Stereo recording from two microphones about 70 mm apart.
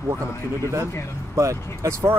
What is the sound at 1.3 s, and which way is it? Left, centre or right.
Speech, right.